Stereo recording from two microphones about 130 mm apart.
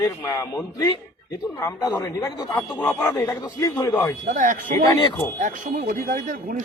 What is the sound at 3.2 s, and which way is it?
Speech, 25° left (ahead or behind).